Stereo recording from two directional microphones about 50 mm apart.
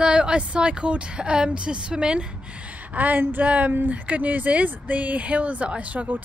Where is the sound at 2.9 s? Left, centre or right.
Right.